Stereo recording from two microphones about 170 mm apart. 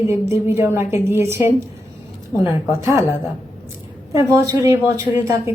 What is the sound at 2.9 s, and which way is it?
Speech, 20° left (ahead or behind).